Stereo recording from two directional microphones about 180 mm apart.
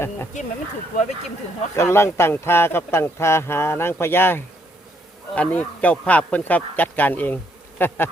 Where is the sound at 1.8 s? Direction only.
15° left (ahead or behind).